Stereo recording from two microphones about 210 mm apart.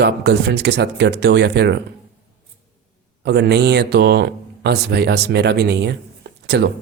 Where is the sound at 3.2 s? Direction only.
50° right (ahead or behind).